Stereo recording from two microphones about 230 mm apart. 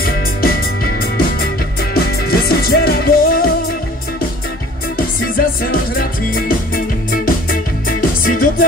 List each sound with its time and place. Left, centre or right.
0.0 s music: left
4.9 s music: left